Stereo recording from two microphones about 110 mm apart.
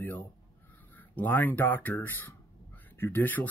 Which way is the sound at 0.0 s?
15° left (ahead or behind).